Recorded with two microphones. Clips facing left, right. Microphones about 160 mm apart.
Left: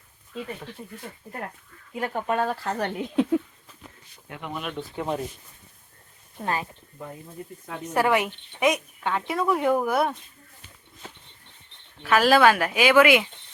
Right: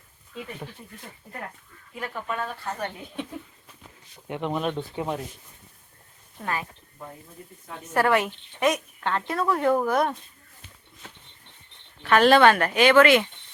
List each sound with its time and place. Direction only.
2.0 s speech: 50° left (ahead or behind)
2.5 s speech: 75° left (ahead or behind); by 3.4 s 90° left
4.3 s speech: 25° right (ahead or behind)
6.4 s speech: 30° left (ahead or behind)
7.9 s a woman's voice: 15° left (ahead or behind)
12.0 s speech: 5° left (ahead or behind)